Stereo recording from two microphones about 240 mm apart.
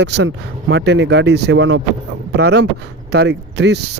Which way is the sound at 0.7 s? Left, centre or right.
Right.